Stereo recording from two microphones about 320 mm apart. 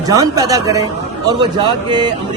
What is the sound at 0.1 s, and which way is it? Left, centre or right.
A man's voice, centre.